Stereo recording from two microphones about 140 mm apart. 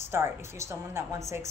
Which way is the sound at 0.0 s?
15° right (ahead or behind).